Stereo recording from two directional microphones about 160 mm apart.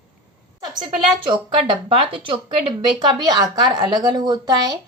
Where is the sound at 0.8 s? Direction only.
30° right (ahead or behind).